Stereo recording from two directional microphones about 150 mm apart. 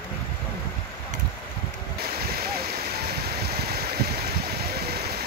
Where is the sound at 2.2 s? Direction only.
90° right.